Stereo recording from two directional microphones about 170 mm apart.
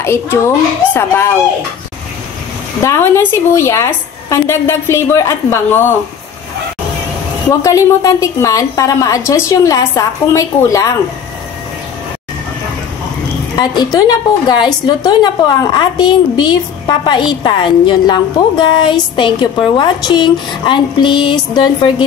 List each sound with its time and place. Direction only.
0.0 s a woman's voice: 15° left (ahead or behind)
2.8 s a woman's voice: 15° left (ahead or behind)
7.6 s a woman's voice: 20° left (ahead or behind)
13.6 s a woman's voice: 25° left (ahead or behind)